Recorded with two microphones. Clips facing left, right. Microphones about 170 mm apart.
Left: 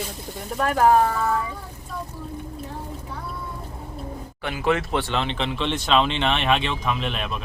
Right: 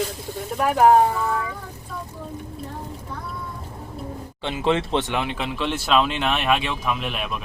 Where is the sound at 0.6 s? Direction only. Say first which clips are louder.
Right 2 dB; 15° right (ahead or behind).